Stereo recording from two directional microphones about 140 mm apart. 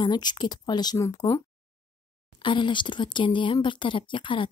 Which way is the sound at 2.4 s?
35° left (ahead or behind).